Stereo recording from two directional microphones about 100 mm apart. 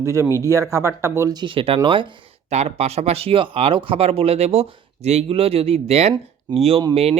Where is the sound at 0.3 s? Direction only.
30° left (ahead or behind).